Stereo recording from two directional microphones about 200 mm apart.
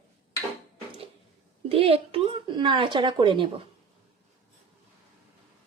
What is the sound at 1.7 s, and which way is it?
Speech, 30° right (ahead or behind).